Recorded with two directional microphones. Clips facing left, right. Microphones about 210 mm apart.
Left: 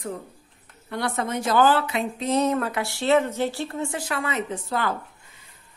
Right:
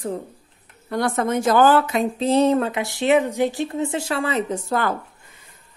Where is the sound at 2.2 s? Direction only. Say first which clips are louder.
Right 5 dB; 30° right (ahead or behind).